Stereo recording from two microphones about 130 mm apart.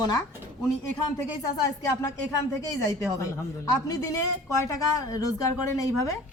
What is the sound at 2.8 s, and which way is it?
Speech, 25° left (ahead or behind).